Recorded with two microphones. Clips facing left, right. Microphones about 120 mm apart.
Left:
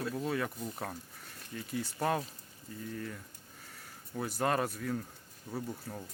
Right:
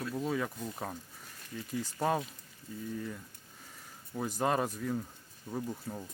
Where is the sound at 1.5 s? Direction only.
10° right (ahead or behind).